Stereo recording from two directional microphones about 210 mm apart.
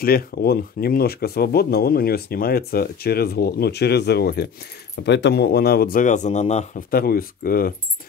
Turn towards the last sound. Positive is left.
turn(degrees=45)  # may be behind; listen again after turning